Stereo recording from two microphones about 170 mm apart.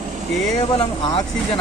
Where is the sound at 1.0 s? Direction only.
25° left (ahead or behind).